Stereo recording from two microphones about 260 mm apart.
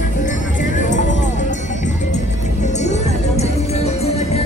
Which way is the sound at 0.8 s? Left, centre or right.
Left.